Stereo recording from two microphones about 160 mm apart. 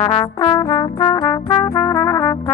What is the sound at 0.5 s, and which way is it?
Brass instrument, 20° left (ahead or behind).